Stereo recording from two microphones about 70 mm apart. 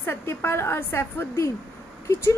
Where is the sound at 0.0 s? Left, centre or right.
Left.